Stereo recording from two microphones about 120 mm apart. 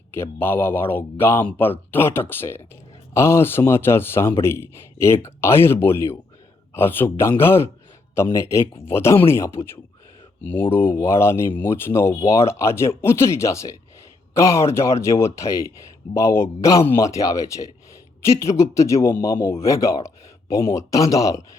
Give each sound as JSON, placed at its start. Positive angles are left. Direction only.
{"t": 0.1, "sound": "speech", "side_deg": 20}